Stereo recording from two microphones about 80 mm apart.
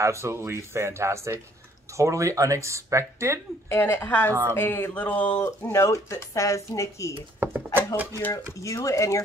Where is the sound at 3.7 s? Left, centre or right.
Left.